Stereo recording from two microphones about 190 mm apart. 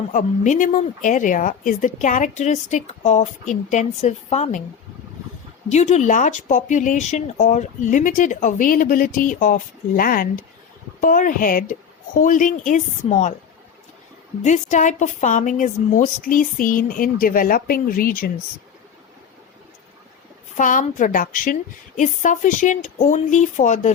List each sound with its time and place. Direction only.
0.1 s speech: 40° left (ahead or behind)
5.6 s a woman's voice: 35° left (ahead or behind)
14.4 s a woman's voice: 40° left (ahead or behind)
20.6 s speech: 45° left (ahead or behind)